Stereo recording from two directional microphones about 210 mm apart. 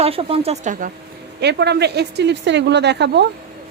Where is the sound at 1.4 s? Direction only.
55° right (ahead or behind).